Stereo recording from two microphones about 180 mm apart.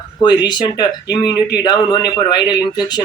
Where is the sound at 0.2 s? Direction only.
25° left (ahead or behind).